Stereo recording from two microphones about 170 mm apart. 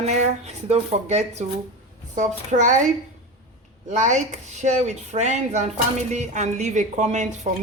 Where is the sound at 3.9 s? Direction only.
45° right (ahead or behind).